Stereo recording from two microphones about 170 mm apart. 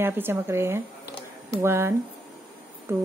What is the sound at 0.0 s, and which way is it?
A woman's voice, 15° right (ahead or behind).